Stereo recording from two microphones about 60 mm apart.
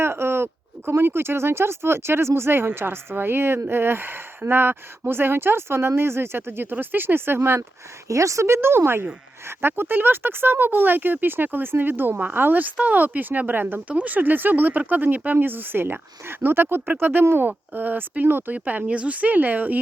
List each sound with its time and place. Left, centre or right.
0.0 s speech: right
8.0 s a woman's voice: right
18.5 s speech: right